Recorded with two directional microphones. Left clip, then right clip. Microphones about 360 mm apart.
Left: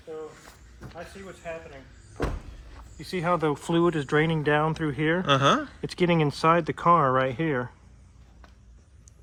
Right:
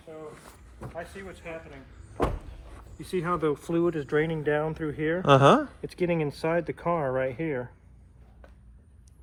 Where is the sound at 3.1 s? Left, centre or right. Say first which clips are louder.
Left 2 dB; centre.